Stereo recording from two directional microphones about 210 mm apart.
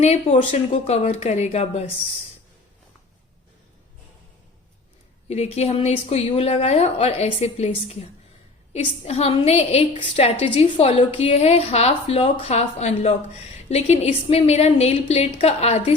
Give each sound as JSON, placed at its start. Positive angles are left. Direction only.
{"t": 0.0, "sound": "speech", "side_deg": 30}
{"t": 5.3, "sound": "a woman's voice", "side_deg": 30}
{"t": 8.7, "sound": "a woman's voice", "side_deg": 30}